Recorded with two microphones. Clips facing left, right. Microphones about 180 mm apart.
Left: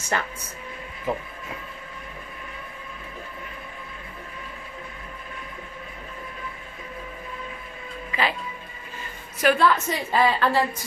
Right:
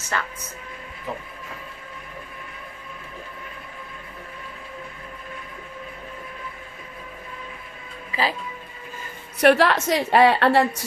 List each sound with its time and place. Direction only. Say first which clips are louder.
0.1 s speech: left 1 dB; 20° left (ahead or behind)
8.1 s speech: right 1 dB; 35° right (ahead or behind)
9.4 s a woman's voice: right 3 dB; 75° right (ahead or behind)